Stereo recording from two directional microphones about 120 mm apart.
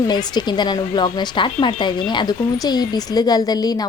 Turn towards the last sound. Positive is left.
turn(degrees=30)  # may be behind; listen again after turning